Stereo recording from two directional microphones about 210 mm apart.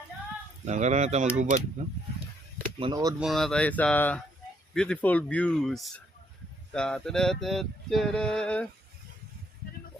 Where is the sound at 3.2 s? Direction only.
Centre (ahead or behind).